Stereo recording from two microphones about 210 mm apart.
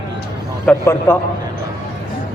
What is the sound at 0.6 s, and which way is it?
Speech, 10° left (ahead or behind).